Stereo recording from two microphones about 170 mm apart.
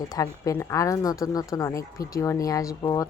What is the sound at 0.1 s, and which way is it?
A woman's voice, 20° left (ahead or behind).